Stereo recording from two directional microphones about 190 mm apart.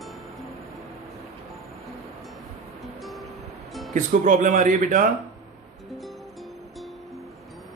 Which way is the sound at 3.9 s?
40° right (ahead or behind).